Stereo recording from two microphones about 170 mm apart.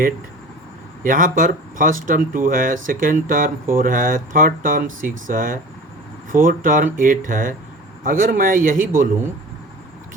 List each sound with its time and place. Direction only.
1.0 s speech: 55° right (ahead or behind)